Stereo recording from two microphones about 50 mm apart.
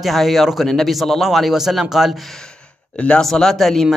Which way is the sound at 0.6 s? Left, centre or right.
Centre.